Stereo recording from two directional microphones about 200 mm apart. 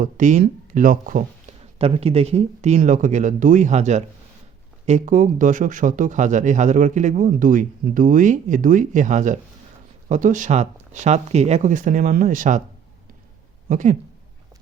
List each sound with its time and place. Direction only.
0.0 s speech: 40° right (ahead or behind)
1.8 s speech: 30° right (ahead or behind)
13.7 s speech: 40° right (ahead or behind)